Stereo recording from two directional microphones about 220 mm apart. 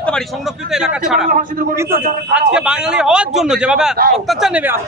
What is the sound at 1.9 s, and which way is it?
Speech, 35° right (ahead or behind).